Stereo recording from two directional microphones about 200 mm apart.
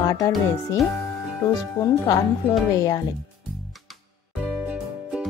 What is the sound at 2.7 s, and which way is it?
Speech, 15° left (ahead or behind).